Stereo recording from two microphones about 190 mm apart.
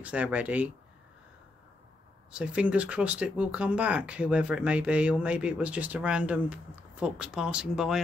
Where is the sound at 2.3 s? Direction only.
5° right (ahead or behind).